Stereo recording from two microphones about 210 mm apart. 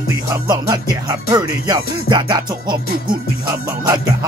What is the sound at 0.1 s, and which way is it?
Music, 15° right (ahead or behind).